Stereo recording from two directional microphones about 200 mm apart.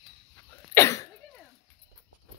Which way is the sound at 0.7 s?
15° left (ahead or behind).